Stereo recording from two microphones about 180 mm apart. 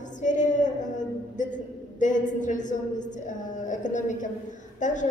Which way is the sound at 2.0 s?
45° left (ahead or behind).